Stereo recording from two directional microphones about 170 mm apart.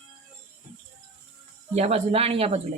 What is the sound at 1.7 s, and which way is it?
Speech, 40° right (ahead or behind).